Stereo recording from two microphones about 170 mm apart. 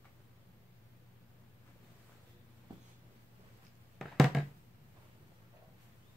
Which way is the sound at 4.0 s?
Centre (ahead or behind).